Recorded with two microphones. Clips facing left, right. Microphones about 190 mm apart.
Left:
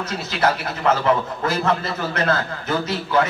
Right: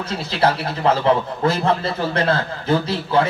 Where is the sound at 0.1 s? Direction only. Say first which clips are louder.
Right 3 dB; 30° right (ahead or behind).